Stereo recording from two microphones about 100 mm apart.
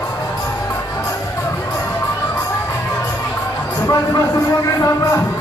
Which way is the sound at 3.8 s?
35° left (ahead or behind).